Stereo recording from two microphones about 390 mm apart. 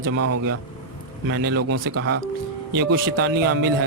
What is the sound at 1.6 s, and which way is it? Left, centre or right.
Speech, right.